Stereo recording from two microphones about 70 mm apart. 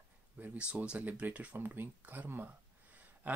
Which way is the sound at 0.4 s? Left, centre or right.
Centre.